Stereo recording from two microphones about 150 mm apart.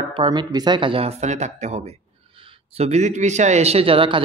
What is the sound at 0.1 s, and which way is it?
Speech, 30° right (ahead or behind).